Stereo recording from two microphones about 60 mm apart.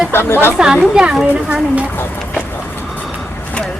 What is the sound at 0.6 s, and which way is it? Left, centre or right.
Speech, centre.